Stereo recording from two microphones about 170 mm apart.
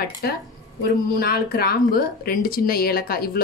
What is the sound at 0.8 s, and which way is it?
Speech, 60° left (ahead or behind).